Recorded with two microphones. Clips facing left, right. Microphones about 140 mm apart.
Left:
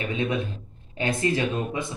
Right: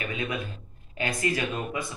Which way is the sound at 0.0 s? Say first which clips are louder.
Left 5 dB; 25° left (ahead or behind).